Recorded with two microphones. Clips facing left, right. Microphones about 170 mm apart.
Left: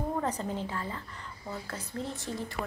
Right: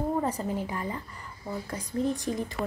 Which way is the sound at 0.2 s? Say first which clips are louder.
Right 3 dB; 10° right (ahead or behind).